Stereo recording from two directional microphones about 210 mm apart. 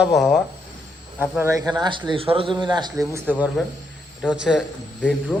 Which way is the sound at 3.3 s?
5° right (ahead or behind).